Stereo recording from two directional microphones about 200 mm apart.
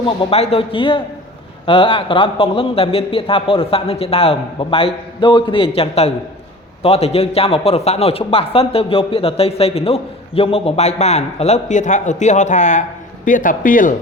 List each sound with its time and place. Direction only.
0.0 s a man's voice: 25° left (ahead or behind); by 13.9 s 45° left (ahead or behind)